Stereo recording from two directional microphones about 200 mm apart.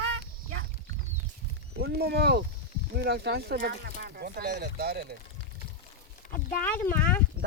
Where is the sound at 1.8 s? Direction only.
55° right (ahead or behind).